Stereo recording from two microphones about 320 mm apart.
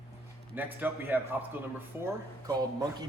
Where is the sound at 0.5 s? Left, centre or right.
Centre.